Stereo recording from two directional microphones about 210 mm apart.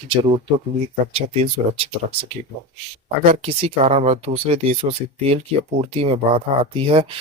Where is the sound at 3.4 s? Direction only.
30° right (ahead or behind).